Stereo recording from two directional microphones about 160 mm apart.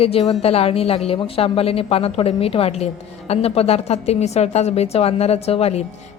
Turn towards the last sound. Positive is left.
turn(degrees=40)  # may be behind; listen again after turning